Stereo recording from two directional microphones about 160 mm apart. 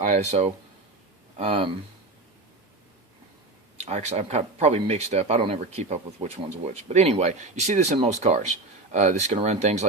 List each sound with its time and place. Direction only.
0.1 s speech: 45° right (ahead or behind)
3.8 s speech: 45° right (ahead or behind)